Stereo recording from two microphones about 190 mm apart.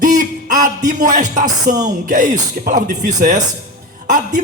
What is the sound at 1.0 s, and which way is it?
Speech, 40° right (ahead or behind).